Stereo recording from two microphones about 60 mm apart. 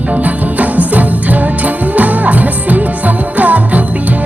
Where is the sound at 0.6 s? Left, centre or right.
Right.